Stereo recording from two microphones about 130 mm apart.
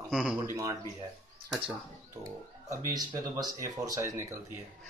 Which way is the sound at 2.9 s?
30° right (ahead or behind).